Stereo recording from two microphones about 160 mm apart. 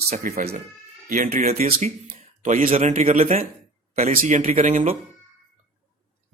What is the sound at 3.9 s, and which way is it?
Speech, 60° right (ahead or behind).